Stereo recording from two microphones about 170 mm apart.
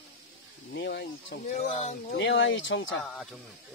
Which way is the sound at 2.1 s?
90° left.